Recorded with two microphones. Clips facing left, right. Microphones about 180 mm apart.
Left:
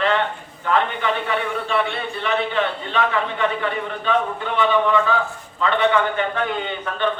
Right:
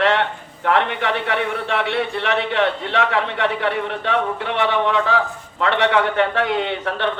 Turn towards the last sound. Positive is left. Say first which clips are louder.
# right 2 dB
turn(degrees=-80)